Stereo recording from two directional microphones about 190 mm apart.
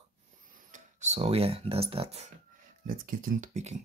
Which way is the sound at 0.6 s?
40° right (ahead or behind).